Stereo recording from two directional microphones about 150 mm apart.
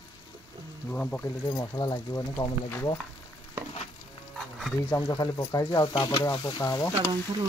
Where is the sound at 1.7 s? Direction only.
25° left (ahead or behind).